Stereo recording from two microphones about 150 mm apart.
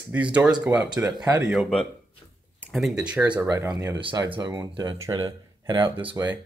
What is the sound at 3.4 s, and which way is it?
Speech, 25° right (ahead or behind).